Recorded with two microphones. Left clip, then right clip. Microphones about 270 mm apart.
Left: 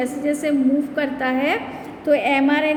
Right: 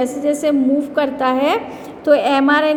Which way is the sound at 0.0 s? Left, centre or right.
Centre.